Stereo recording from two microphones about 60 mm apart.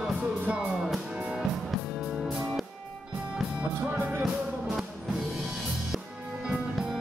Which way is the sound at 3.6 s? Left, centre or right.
Right.